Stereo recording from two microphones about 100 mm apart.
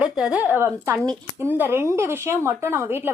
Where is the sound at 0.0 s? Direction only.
10° right (ahead or behind).